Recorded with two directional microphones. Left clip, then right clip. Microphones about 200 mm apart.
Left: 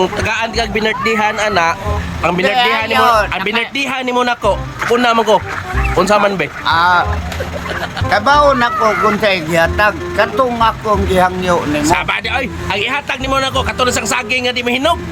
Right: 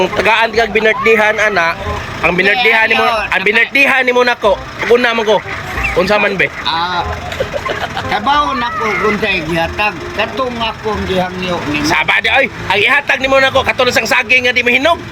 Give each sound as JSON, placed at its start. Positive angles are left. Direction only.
{"t": 0.2, "sound": "speech", "side_deg": 10}
{"t": 6.7, "sound": "speech", "side_deg": 40}
{"t": 8.1, "sound": "speech", "side_deg": 5}